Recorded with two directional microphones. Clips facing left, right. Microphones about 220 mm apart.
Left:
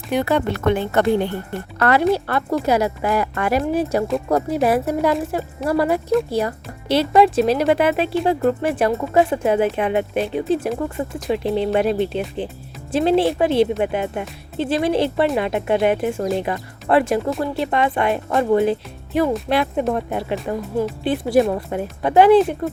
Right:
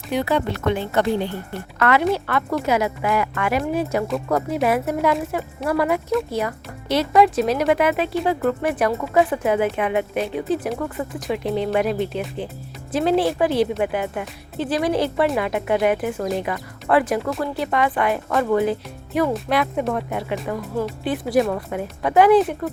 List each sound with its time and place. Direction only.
0.1 s speech: 55° left (ahead or behind)
1.8 s speech: 35° left (ahead or behind)